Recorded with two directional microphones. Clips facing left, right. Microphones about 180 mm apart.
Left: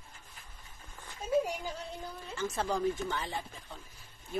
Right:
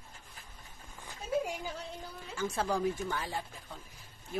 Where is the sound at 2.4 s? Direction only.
5° right (ahead or behind).